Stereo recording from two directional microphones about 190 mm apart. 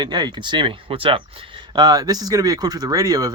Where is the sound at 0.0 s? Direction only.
20° right (ahead or behind).